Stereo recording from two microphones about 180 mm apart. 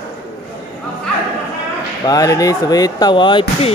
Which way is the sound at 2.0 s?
20° left (ahead or behind).